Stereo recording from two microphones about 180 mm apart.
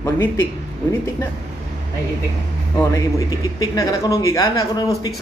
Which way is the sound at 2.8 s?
20° left (ahead or behind).